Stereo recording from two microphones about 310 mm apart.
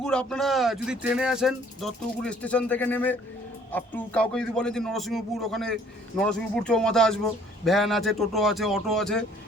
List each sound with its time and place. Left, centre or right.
0.0 s speech: centre